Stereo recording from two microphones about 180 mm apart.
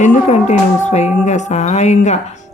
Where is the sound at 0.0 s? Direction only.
40° left (ahead or behind).